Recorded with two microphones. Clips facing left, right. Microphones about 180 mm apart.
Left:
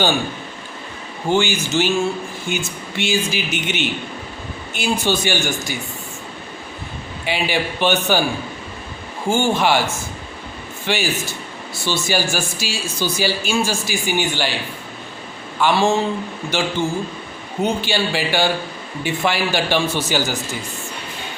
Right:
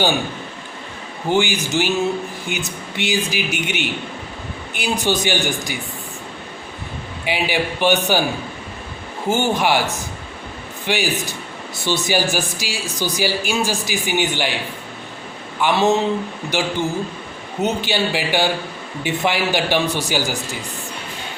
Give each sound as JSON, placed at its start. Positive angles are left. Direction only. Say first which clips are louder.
{"t": 1.3, "sound": "speech", "louder": "even", "side_deg": -15}
{"t": 7.3, "sound": "speech", "louder": "even", "side_deg": -15}
{"t": 9.3, "sound": "speech", "louder": "left 1 dB", "side_deg": -15}
{"t": 15.6, "sound": "speech", "louder": "even", "side_deg": -20}